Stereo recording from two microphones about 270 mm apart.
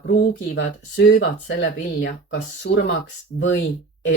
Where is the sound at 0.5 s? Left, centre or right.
Left.